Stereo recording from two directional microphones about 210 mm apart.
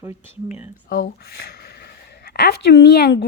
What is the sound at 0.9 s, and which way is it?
A woman's voice, 45° left (ahead or behind).